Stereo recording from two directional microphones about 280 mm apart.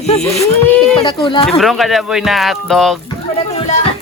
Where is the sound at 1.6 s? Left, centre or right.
Centre.